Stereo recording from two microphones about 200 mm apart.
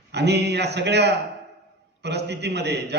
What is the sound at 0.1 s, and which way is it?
A man's voice, 55° right (ahead or behind).